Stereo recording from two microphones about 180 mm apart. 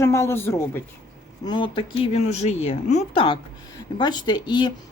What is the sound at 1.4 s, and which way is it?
A woman's voice, 25° left (ahead or behind).